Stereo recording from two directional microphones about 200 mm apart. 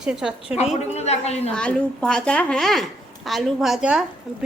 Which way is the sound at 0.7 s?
30° left (ahead or behind).